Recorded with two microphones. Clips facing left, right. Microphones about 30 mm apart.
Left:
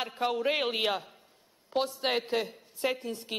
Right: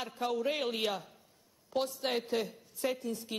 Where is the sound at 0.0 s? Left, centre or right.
Left.